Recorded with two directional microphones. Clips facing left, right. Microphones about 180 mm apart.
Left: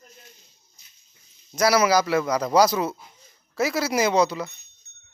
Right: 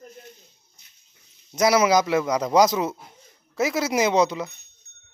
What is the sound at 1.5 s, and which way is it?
A man's voice, 20° right (ahead or behind).